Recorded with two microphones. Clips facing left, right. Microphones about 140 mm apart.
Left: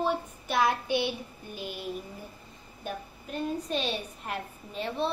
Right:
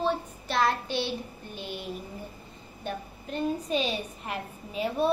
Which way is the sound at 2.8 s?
5° left (ahead or behind).